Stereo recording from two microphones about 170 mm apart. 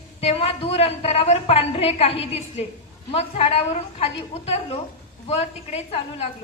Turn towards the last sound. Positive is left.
turn(degrees=40)  # may be behind; listen again after turning